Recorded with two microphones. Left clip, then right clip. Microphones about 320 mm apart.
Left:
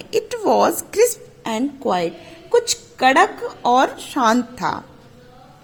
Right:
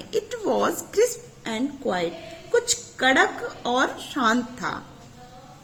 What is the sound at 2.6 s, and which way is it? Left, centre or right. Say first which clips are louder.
Speech: left 5 dB; left.